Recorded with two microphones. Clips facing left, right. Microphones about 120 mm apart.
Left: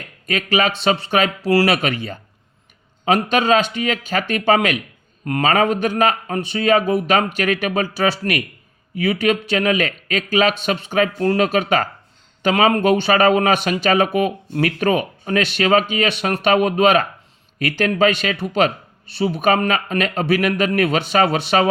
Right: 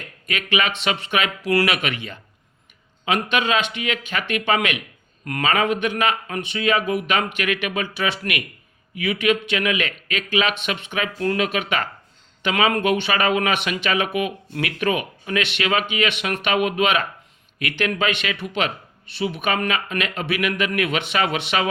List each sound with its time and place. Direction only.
0.3 s speech: 40° left (ahead or behind)